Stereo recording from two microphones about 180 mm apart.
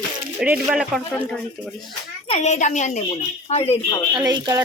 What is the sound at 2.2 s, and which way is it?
A woman's voice, 35° left (ahead or behind).